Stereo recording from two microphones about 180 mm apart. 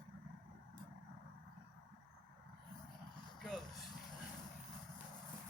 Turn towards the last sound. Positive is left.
turn(degrees=0)  # may be behind; listen again after turning